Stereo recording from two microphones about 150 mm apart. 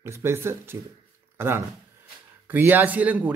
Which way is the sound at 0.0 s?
15° right (ahead or behind).